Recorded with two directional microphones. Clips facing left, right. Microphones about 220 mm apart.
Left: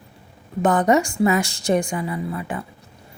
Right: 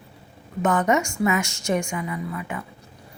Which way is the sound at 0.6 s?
35° left (ahead or behind).